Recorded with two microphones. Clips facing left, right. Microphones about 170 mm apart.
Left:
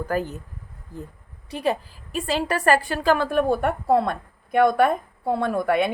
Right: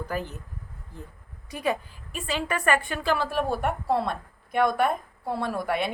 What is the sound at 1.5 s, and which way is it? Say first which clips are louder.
A woman's voice: left 3 dB; 30° left (ahead or behind).